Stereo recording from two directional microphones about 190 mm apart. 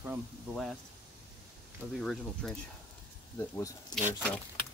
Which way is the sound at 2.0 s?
Centre (ahead or behind).